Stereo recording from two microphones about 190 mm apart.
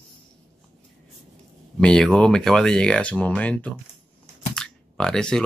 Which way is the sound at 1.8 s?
5° left (ahead or behind).